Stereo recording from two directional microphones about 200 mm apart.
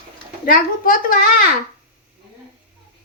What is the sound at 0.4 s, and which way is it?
Speech, 45° left (ahead or behind).